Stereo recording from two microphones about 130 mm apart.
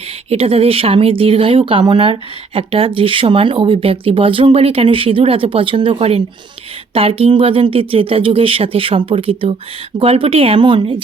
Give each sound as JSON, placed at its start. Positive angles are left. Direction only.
{"t": 0.3, "sound": "speech", "side_deg": -45}